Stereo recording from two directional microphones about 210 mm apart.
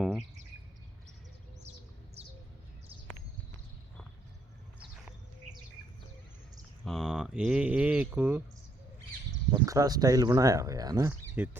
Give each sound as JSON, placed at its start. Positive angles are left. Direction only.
{"t": 0.0, "sound": "bird", "side_deg": 0}
{"t": 2.2, "sound": "bird", "side_deg": -30}
{"t": 6.8, "sound": "a sound", "side_deg": 0}
{"t": 9.5, "sound": "speech", "side_deg": -15}